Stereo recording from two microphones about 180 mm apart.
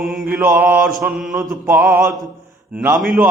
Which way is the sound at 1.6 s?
10° right (ahead or behind).